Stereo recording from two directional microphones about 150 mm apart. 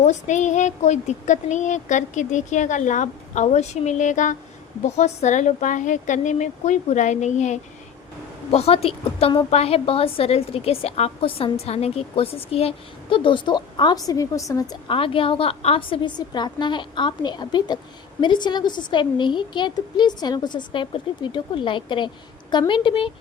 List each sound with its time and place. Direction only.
0.0 s a woman's voice: 50° left (ahead or behind); by 14.8 s 20° left (ahead or behind)
14.8 s a woman's voice: 35° left (ahead or behind)